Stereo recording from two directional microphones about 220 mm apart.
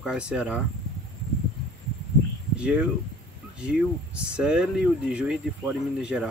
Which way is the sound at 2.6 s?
5° right (ahead or behind).